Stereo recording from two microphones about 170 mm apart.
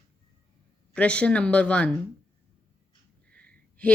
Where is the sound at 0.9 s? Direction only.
5° left (ahead or behind).